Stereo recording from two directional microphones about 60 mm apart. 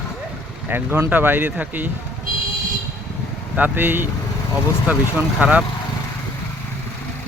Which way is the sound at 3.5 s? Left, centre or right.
Right.